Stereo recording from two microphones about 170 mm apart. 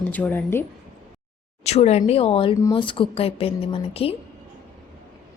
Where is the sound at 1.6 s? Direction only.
40° left (ahead or behind).